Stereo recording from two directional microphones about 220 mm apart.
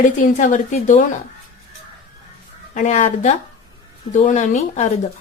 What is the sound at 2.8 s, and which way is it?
A woman's voice, 35° left (ahead or behind).